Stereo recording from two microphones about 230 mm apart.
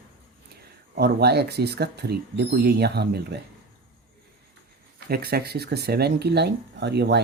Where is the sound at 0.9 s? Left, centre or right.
Right.